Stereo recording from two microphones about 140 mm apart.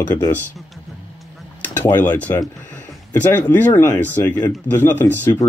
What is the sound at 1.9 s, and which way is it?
Speech, 10° left (ahead or behind).